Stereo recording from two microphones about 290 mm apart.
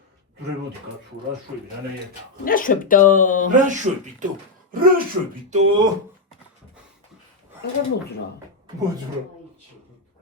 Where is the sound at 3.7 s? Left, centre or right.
Right.